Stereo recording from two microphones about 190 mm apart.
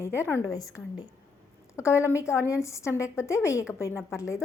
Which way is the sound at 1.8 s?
15° left (ahead or behind).